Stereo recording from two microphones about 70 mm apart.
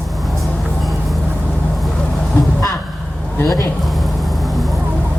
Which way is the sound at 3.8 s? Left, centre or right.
Centre.